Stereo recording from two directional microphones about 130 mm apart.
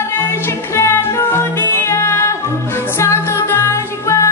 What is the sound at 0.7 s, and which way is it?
Music, 20° left (ahead or behind).